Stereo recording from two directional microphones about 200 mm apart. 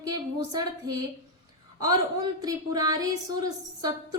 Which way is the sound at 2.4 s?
20° right (ahead or behind).